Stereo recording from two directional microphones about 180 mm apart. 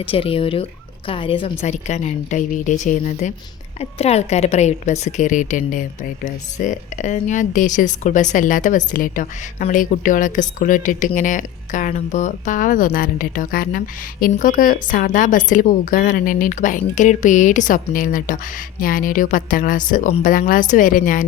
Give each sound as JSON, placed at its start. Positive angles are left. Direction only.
{"t": 0.0, "sound": "speech", "side_deg": 30}